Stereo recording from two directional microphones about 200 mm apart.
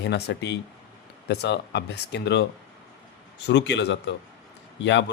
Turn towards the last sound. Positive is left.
turn(degrees=65)  # may be behind; listen again after turning